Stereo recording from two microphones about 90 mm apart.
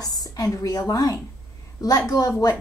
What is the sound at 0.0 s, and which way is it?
A woman's voice, 40° left (ahead or behind).